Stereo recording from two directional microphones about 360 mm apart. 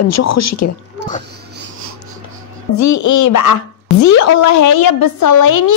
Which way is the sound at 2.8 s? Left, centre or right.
Left.